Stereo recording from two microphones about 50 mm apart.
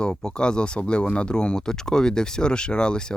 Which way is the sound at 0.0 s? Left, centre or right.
Centre.